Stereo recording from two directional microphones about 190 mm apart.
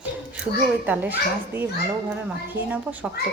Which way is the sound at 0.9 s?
10° right (ahead or behind).